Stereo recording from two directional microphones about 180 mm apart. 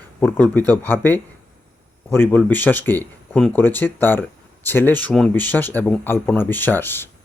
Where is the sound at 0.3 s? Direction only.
10° left (ahead or behind).